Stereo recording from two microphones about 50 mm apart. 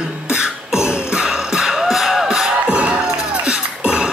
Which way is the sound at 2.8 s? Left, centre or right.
Centre.